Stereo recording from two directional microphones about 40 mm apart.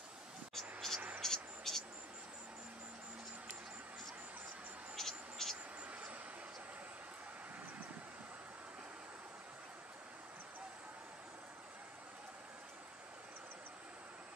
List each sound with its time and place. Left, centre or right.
0.6 s vehicle: centre
4.9 s vehicle: centre
5.9 s vehicle: right